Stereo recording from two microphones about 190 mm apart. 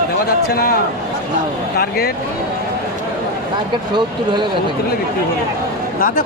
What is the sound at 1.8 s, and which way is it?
Speech, 55° left (ahead or behind).